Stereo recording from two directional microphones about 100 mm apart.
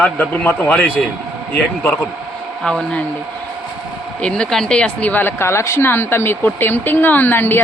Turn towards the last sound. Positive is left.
turn(degrees=20)  # may be behind; listen again after turning